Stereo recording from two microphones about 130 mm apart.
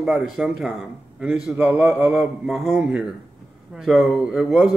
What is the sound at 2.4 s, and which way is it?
Speech, centre (ahead or behind).